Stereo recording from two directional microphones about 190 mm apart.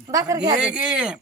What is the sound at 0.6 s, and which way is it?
Speech, 5° right (ahead or behind).